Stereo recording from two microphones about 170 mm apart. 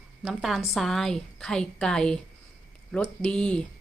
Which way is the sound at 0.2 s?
Centre (ahead or behind).